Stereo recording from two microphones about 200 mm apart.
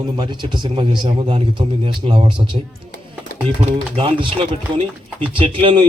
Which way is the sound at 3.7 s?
25° right (ahead or behind).